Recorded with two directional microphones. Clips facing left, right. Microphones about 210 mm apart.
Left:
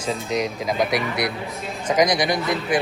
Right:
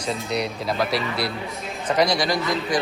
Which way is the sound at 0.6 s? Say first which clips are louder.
Left 2 dB; 15° left (ahead or behind).